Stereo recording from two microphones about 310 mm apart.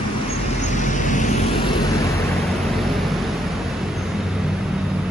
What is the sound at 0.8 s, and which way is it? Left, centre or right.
Vehicle, left.